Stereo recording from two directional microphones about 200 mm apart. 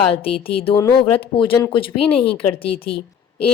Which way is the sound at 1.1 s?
25° left (ahead or behind).